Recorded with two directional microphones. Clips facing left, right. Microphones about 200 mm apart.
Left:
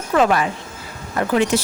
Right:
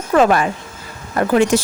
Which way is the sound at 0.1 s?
45° right (ahead or behind).